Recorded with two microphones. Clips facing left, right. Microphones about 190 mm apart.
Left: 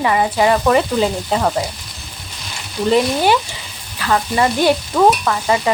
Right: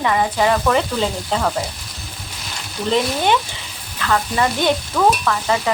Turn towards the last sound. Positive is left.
turn(degrees=20)  # may be behind; listen again after turning